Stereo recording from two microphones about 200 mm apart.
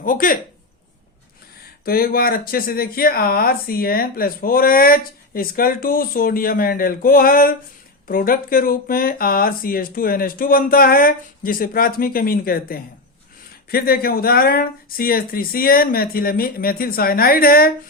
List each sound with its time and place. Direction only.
0.0 s speech: 45° left (ahead or behind)
1.8 s speech: 50° left (ahead or behind)